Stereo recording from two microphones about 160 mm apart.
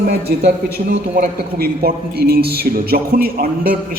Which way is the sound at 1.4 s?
75° right (ahead or behind).